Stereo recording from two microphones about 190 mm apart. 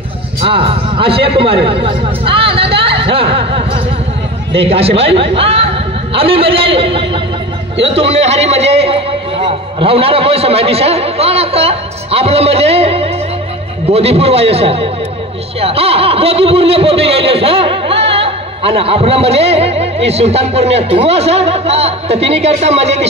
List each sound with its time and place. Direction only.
0.4 s a man's voice: 30° right (ahead or behind)